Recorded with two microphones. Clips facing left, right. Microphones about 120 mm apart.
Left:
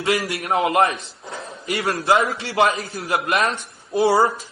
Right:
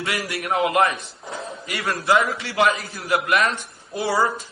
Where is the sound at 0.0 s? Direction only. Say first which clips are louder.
Left 5 dB; 30° left (ahead or behind).